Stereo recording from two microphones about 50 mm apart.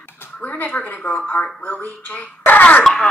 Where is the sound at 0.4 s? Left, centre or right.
Left.